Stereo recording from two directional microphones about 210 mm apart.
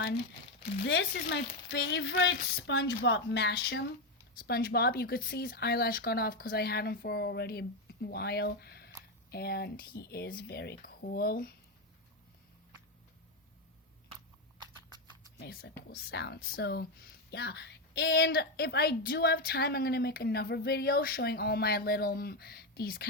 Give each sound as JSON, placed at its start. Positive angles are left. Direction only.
{"t": 0.9, "sound": "a woman's voice", "side_deg": 55}
{"t": 15.4, "sound": "a woman's voice", "side_deg": 50}